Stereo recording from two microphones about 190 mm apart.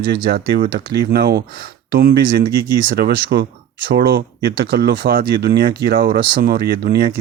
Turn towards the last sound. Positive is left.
turn(degrees=-55)  # may be behind; listen again after turning